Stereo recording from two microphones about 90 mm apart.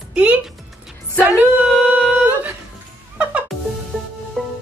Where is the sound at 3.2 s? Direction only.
15° right (ahead or behind).